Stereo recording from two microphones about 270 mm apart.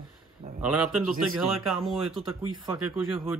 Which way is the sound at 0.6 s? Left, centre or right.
Centre.